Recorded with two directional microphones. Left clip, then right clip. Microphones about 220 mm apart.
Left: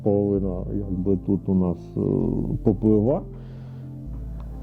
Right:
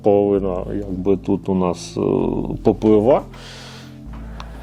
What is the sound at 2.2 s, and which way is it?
Speech, 40° right (ahead or behind).